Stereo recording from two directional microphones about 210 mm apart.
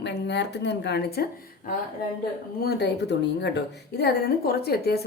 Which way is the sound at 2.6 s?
55° left (ahead or behind).